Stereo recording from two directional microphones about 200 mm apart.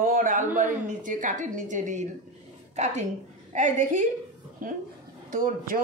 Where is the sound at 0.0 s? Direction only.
45° right (ahead or behind).